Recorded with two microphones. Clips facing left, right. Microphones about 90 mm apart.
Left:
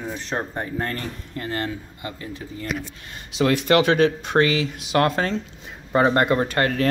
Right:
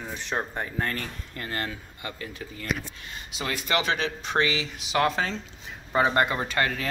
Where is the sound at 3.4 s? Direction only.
70° left (ahead or behind); by 6.8 s 50° left (ahead or behind).